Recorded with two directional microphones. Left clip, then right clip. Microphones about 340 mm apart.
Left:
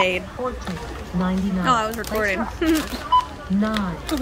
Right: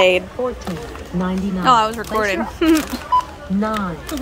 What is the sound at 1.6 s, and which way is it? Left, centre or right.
Speech, centre.